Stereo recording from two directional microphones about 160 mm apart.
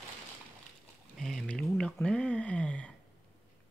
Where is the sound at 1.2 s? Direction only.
Centre (ahead or behind).